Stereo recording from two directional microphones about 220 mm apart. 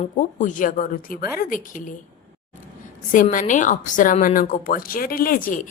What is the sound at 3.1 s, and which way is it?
A woman's voice, 35° left (ahead or behind).